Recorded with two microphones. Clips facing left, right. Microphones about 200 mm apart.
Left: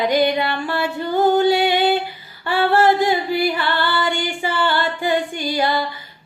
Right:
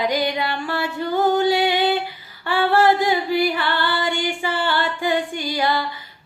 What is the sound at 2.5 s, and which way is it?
Singing, 15° right (ahead or behind).